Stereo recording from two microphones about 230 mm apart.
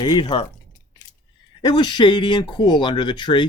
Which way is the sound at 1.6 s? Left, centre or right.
Centre.